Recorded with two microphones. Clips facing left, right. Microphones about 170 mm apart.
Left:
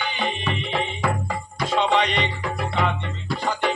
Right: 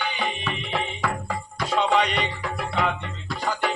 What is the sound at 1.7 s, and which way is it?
Music, 10° right (ahead or behind).